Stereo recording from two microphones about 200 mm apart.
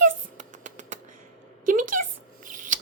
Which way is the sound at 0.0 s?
40° right (ahead or behind).